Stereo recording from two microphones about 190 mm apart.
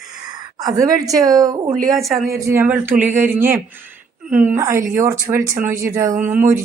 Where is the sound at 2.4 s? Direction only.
15° right (ahead or behind).